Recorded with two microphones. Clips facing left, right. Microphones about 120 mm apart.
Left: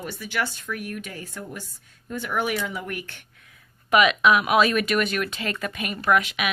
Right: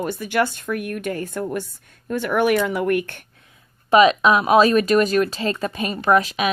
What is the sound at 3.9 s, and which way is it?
Speech, 35° right (ahead or behind).